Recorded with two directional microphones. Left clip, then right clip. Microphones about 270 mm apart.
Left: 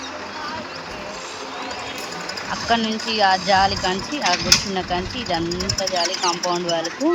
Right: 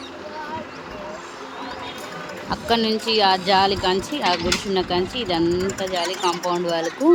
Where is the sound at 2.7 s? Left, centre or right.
Centre.